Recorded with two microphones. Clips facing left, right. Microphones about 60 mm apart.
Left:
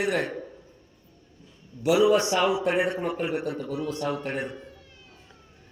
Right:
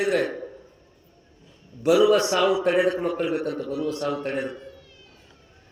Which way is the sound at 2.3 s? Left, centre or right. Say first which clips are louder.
Right 3 dB; right.